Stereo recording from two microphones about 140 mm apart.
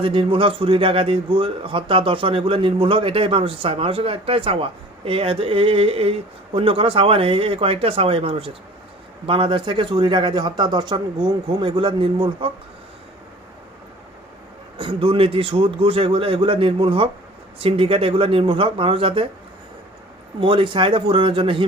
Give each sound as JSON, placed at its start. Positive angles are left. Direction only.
{"t": 0.0, "sound": "a man's voice", "side_deg": -40}
{"t": 14.8, "sound": "a man's voice", "side_deg": -40}
{"t": 20.4, "sound": "a man's voice", "side_deg": -35}